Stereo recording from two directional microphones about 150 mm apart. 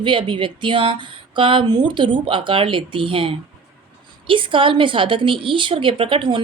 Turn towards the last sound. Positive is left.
turn(degrees=-35)  # may be behind; listen again after turning